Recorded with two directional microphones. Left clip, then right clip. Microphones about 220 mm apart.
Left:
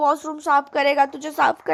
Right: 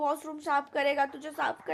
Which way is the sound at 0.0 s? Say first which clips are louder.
Left 11 dB; 25° left (ahead or behind).